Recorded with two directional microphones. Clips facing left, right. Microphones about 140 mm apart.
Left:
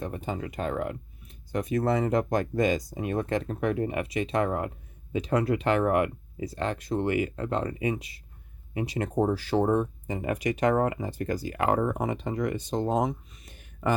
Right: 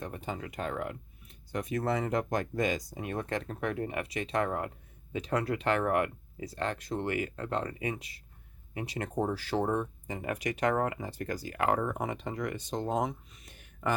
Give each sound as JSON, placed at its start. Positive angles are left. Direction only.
{"t": 0.0, "sound": "speech", "side_deg": 25}